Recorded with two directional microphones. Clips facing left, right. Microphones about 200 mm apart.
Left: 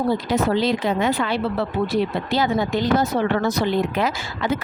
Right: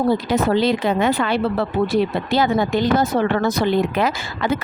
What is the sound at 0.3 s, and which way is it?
Speech, 55° right (ahead or behind).